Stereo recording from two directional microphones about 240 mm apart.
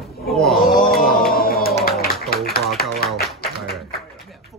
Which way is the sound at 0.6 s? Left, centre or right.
Left.